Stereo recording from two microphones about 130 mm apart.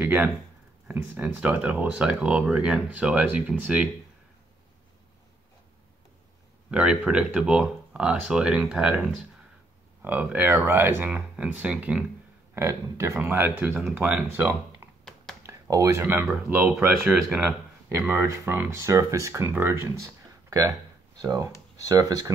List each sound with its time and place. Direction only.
0.0 s speech: 15° right (ahead or behind)
6.7 s speech: 10° right (ahead or behind)
12.5 s speech: 20° right (ahead or behind)